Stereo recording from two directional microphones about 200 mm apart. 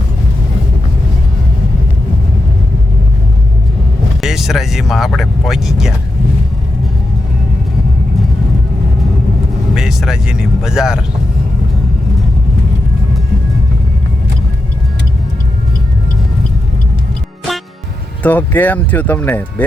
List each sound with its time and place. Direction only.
4.2 s speech: centre (ahead or behind)
9.7 s speech: centre (ahead or behind)
18.2 s speech: 10° left (ahead or behind)